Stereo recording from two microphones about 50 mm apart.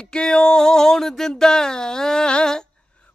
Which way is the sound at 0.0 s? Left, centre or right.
Centre.